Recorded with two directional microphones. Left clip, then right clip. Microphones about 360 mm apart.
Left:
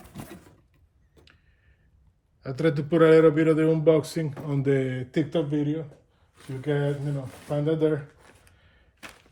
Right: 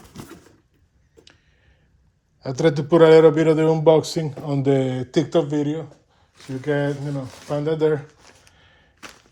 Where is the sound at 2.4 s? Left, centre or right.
Centre.